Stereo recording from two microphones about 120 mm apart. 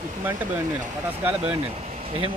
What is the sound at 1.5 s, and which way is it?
Speech, 55° right (ahead or behind).